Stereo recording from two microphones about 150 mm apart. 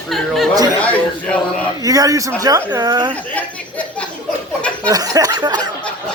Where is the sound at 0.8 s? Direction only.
10° left (ahead or behind).